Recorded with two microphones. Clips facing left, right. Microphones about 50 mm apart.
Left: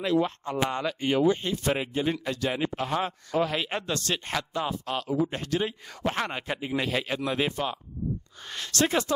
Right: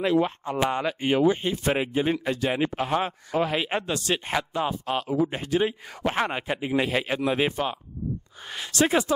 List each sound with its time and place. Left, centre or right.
0.0 s speech: right